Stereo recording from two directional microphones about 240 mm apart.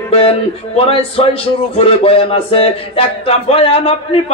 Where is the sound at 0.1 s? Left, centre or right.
Left.